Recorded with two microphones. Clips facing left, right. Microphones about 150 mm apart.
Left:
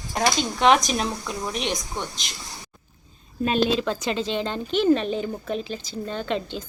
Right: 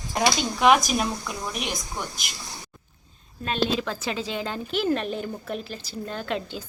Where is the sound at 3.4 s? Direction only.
Centre (ahead or behind).